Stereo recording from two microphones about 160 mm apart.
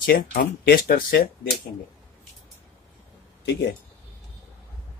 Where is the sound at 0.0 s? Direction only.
65° left (ahead or behind).